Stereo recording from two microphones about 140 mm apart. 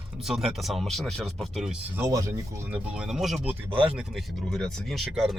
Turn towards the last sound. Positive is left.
turn(degrees=0)  # may be behind; listen again after turning